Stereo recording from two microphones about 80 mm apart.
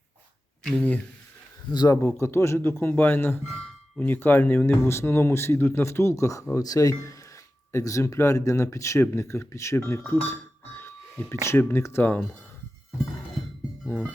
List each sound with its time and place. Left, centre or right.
0.6 s speech: centre
1.9 s speech: left
3.5 s speech: centre; by 10.0 s left
10.8 s a sound: left
11.4 s speech: left
13.8 s music: centre